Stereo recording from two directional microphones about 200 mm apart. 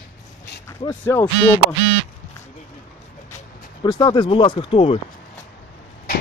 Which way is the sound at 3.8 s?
20° left (ahead or behind).